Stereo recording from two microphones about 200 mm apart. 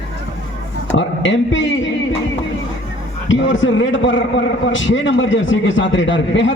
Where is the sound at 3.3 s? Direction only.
70° left (ahead or behind).